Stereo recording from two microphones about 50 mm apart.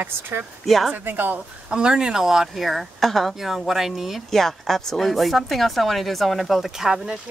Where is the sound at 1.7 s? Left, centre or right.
Centre.